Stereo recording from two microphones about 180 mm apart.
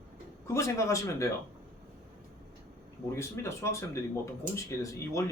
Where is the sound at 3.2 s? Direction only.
15° left (ahead or behind).